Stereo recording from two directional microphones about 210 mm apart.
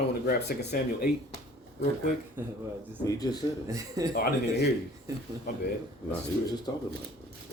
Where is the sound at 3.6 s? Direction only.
15° right (ahead or behind).